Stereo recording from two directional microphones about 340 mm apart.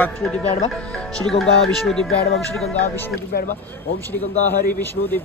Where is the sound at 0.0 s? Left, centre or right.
Centre.